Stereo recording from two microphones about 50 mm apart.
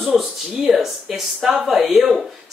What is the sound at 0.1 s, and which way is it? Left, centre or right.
Speech, centre.